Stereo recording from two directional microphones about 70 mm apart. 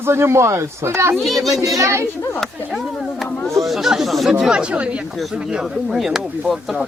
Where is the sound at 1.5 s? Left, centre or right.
Right.